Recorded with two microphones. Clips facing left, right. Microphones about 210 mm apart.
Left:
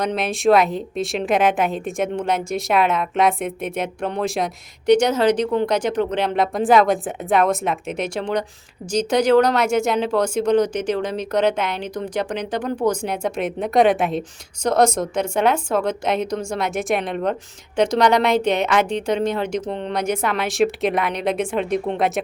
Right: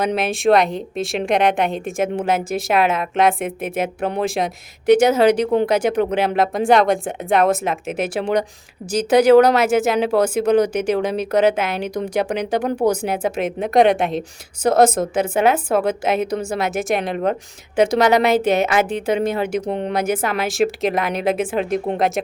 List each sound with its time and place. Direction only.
0.0 s a woman's voice: 5° right (ahead or behind)